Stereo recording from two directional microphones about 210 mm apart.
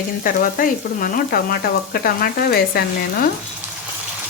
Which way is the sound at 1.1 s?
45° left (ahead or behind).